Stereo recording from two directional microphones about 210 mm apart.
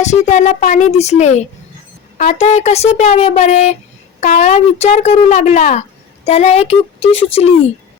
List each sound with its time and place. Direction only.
0.0 s a woman's voice: 35° left (ahead or behind)